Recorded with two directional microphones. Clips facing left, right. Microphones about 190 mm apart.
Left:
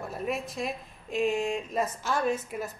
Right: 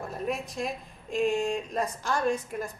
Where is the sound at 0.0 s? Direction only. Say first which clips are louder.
Even; centre (ahead or behind).